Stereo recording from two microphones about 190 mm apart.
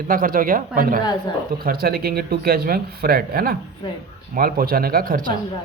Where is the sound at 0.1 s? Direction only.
50° right (ahead or behind).